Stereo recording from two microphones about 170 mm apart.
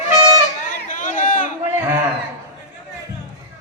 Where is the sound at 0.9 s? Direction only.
50° left (ahead or behind).